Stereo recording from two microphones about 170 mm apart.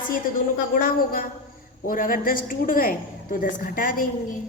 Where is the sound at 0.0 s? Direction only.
55° left (ahead or behind).